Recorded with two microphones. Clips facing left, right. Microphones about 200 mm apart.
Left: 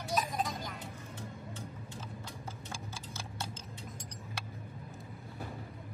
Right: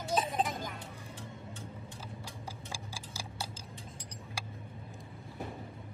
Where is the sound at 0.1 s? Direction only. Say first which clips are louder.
Right 2 dB; 25° right (ahead or behind).